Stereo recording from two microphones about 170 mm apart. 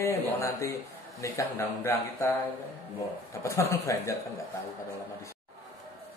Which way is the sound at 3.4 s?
15° left (ahead or behind).